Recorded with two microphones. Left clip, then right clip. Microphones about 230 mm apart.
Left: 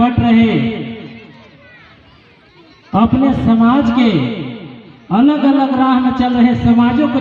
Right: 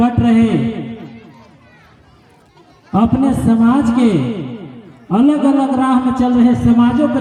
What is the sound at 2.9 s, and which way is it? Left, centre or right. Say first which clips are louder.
A man's voice: left 2 dB; left.